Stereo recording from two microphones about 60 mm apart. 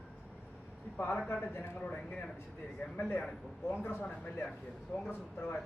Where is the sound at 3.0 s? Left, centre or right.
Left.